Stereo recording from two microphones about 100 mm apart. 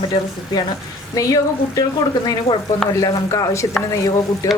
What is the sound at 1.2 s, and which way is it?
Speech, 35° left (ahead or behind).